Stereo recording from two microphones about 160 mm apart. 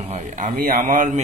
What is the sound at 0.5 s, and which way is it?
Speech, 65° right (ahead or behind).